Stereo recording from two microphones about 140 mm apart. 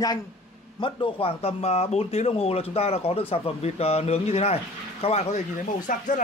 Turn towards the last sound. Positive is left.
turn(degrees=75)  # may be behind; listen again after turning